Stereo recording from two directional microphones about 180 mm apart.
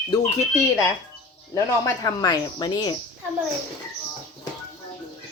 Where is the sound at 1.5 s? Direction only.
15° left (ahead or behind).